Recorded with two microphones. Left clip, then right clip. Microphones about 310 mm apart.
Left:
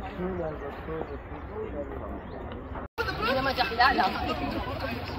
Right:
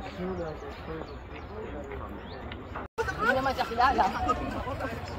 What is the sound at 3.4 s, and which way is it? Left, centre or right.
Speech, right.